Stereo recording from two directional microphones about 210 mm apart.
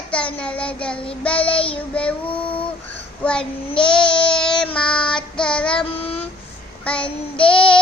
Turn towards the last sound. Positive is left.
turn(degrees=25)  # may be behind; listen again after turning